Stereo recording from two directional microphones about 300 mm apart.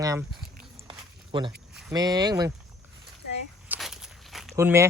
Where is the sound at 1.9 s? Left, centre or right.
Centre.